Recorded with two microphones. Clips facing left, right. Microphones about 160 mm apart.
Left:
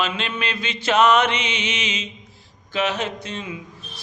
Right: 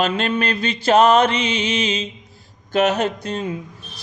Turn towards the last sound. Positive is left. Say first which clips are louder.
# right 6 dB
turn(degrees=-40)  # may be behind; listen again after turning